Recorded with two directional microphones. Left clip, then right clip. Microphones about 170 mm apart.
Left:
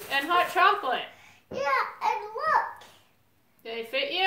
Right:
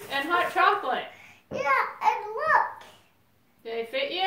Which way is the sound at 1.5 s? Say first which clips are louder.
Right 2 dB; 30° right (ahead or behind).